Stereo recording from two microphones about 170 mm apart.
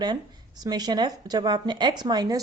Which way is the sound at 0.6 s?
25° right (ahead or behind).